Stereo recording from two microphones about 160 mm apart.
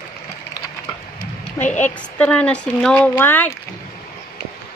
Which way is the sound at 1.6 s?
20° left (ahead or behind).